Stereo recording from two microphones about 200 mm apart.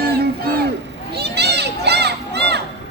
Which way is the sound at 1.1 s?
55° right (ahead or behind).